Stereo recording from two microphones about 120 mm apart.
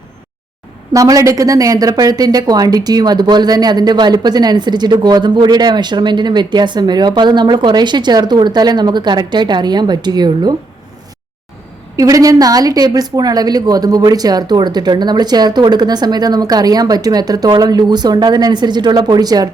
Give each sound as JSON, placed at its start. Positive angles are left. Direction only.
{"t": 0.9, "sound": "a woman's voice", "side_deg": -25}
{"t": 11.9, "sound": "a woman's voice", "side_deg": -30}